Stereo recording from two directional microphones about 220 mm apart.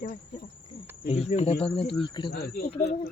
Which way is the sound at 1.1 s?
30° left (ahead or behind).